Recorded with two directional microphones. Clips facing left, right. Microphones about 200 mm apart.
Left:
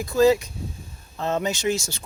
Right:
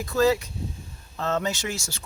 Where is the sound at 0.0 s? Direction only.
15° left (ahead or behind).